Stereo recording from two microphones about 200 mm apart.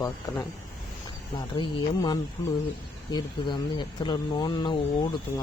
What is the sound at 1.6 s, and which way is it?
Speech, 20° left (ahead or behind).